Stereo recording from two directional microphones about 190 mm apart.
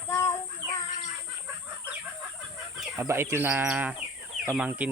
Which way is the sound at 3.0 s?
15° right (ahead or behind).